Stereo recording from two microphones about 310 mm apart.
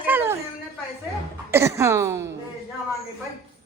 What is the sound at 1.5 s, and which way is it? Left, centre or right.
Speech, centre.